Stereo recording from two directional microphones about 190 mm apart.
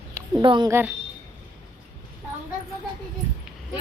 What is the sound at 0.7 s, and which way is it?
Speech, 10° right (ahead or behind).